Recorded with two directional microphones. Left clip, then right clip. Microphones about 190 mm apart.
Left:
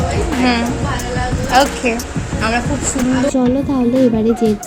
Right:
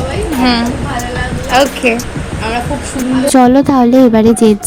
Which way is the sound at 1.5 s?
15° left (ahead or behind).